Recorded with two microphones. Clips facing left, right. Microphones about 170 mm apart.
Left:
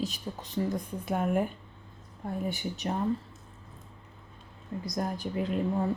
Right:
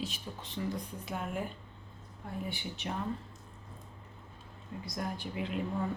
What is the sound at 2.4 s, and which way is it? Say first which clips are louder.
Speech: left 7 dB; 45° left (ahead or behind).